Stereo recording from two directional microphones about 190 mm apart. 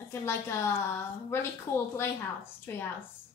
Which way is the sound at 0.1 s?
15° left (ahead or behind).